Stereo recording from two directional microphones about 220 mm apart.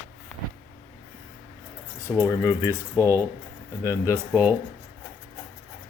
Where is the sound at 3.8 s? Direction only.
15° left (ahead or behind).